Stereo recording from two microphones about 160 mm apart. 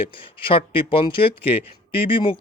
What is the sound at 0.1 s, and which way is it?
Speech, 35° left (ahead or behind).